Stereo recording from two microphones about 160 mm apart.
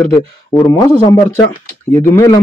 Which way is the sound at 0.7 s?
25° left (ahead or behind).